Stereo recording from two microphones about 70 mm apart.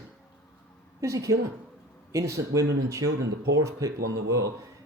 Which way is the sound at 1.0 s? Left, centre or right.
Right.